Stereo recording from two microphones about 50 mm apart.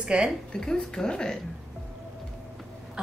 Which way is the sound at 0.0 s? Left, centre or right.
Centre.